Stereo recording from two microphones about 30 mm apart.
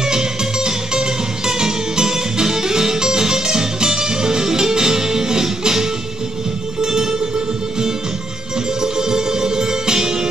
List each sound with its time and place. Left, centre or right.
0.0 s music: right
8.8 s music: right